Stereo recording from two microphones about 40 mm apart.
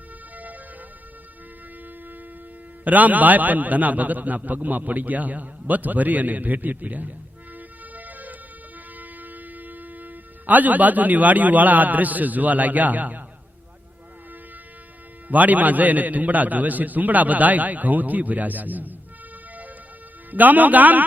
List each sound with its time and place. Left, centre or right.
2.8 s a man's voice: right
7.9 s music: right
9.0 s speech: right
15.3 s a man's voice: right
20.3 s a man's voice: right